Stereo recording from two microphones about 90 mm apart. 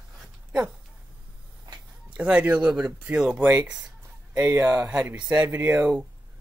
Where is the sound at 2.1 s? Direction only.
15° right (ahead or behind).